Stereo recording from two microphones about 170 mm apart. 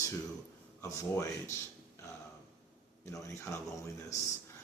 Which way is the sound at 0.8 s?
15° left (ahead or behind).